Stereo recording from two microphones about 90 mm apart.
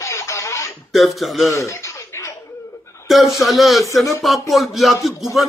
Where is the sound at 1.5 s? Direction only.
35° left (ahead or behind).